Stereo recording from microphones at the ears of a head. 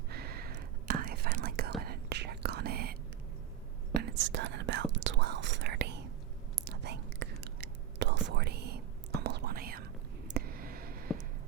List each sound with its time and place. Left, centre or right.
0.1 s whispering: right
3.9 s whispering: right
10.2 s a sound: right